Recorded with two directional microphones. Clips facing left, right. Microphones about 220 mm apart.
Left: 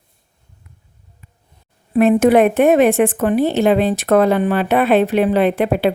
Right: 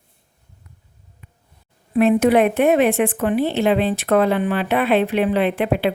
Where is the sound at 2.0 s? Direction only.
45° left (ahead or behind).